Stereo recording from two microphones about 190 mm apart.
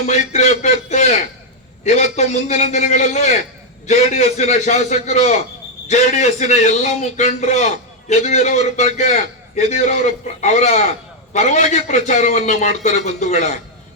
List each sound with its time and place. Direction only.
0.3 s a man's voice: 35° left (ahead or behind)